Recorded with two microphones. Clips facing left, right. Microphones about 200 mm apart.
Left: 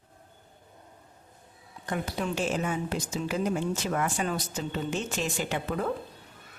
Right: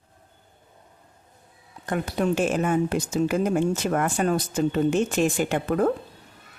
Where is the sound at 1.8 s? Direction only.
50° right (ahead or behind).